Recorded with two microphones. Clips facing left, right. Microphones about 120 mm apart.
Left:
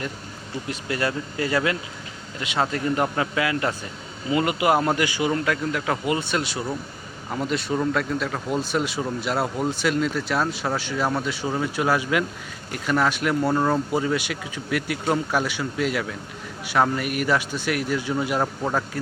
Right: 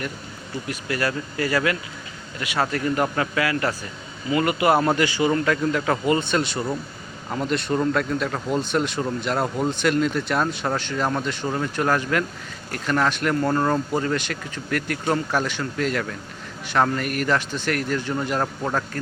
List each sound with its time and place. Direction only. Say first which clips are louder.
0.7 s speech: even; 25° left (ahead or behind)